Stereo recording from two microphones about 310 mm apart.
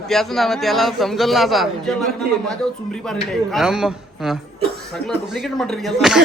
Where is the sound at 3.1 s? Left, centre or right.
Centre.